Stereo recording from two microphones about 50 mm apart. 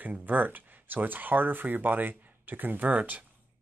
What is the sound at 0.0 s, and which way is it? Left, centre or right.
Speech, right.